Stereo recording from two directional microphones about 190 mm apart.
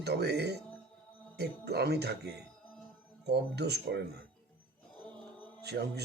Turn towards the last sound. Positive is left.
turn(degrees=-60)  # may be behind; listen again after turning